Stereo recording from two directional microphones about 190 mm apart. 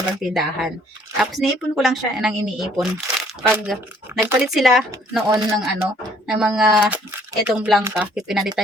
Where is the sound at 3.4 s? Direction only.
10° right (ahead or behind).